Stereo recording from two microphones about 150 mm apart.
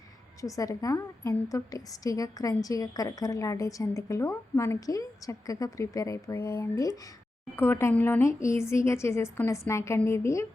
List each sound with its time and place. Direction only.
0.4 s a woman's voice: 20° left (ahead or behind)